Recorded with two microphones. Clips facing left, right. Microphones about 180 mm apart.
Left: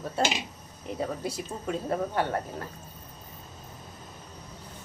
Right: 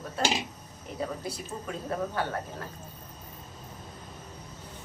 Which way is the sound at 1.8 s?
25° left (ahead or behind).